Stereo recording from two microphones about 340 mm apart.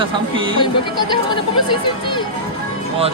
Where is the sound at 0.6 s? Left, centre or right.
Centre.